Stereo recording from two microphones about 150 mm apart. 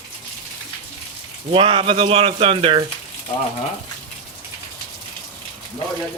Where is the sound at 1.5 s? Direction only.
35° right (ahead or behind).